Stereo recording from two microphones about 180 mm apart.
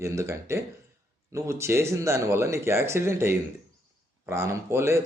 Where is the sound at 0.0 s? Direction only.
15° right (ahead or behind).